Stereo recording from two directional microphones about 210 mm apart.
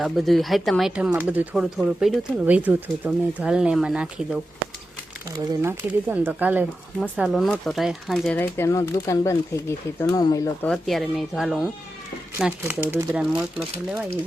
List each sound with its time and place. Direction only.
0.0 s speech: centre (ahead or behind)
5.3 s speech: 20° right (ahead or behind)
6.1 s speech: 5° right (ahead or behind); by 10.7 s 15° left (ahead or behind)
10.7 s speech: centre (ahead or behind)